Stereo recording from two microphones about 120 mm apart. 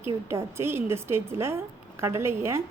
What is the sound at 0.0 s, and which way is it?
A woman's voice, 20° right (ahead or behind).